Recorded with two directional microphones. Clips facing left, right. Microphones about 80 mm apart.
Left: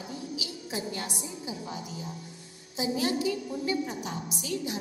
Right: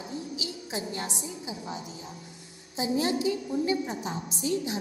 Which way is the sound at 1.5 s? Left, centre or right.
Right.